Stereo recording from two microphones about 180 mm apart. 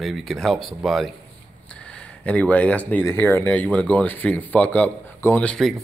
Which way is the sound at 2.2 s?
10° left (ahead or behind).